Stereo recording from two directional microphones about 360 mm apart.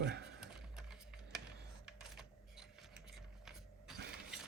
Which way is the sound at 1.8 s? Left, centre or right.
Centre.